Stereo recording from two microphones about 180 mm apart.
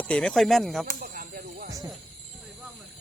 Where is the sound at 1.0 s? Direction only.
55° right (ahead or behind).